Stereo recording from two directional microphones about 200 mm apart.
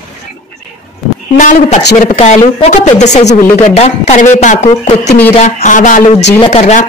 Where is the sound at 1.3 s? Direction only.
40° left (ahead or behind).